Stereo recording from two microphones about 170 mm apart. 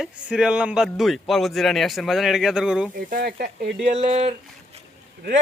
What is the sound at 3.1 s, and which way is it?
Sizzle, 55° right (ahead or behind).